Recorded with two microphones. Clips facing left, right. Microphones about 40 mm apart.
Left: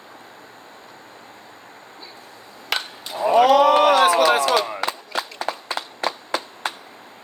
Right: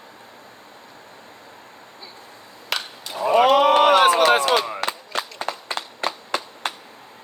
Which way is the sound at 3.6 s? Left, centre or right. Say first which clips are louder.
Even; right.